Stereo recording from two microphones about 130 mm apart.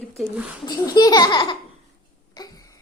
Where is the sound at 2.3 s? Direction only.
30° left (ahead or behind).